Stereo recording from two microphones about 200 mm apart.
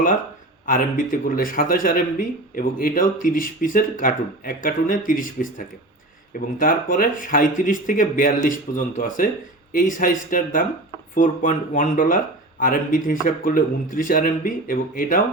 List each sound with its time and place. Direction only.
0.6 s a man's voice: 40° left (ahead or behind)